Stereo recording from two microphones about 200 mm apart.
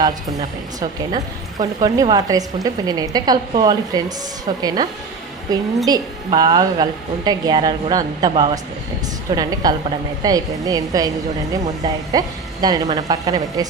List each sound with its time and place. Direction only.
0.8 s a woman's voice: 20° right (ahead or behind)
12.1 s a woman's voice: 20° right (ahead or behind)